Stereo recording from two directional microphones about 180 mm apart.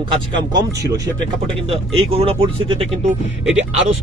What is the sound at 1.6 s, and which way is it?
Speech, 30° right (ahead or behind).